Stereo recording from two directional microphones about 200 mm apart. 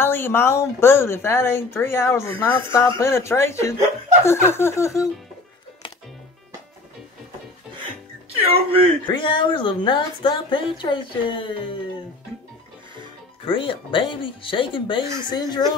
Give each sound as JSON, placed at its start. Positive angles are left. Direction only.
{"t": 0.0, "sound": "speech", "side_deg": 10}
{"t": 8.3, "sound": "speech", "side_deg": -30}
{"t": 9.0, "sound": "speech", "side_deg": 25}
{"t": 13.5, "sound": "speech", "side_deg": 25}